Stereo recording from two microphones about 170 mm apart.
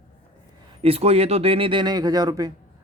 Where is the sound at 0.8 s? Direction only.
35° right (ahead or behind).